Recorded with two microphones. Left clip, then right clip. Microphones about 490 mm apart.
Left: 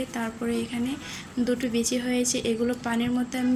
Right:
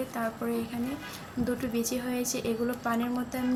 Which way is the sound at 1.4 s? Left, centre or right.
Right.